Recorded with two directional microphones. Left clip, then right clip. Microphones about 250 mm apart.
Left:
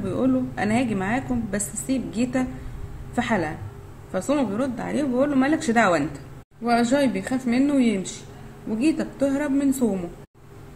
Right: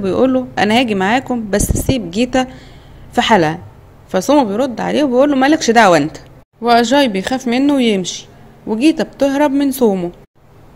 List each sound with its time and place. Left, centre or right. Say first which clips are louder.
0.0 s a woman's voice: right 10 dB; right